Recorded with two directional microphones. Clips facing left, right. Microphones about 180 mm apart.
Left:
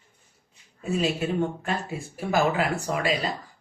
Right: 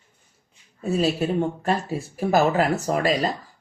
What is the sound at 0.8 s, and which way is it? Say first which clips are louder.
Speech: right 4 dB; 35° right (ahead or behind).